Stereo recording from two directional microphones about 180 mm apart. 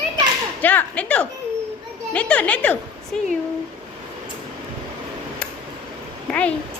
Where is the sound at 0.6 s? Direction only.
10° left (ahead or behind).